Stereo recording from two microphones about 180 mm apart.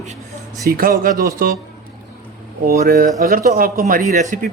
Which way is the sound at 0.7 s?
55° right (ahead or behind).